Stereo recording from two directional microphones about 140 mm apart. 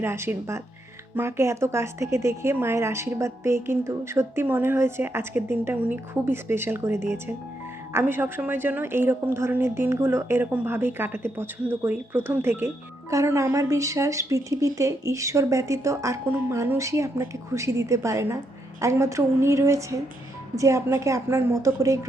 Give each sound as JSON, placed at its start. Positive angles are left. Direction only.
{"t": 0.0, "sound": "a woman's voice", "side_deg": -15}